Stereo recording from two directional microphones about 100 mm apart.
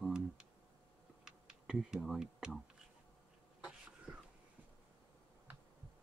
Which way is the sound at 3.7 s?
10° right (ahead or behind).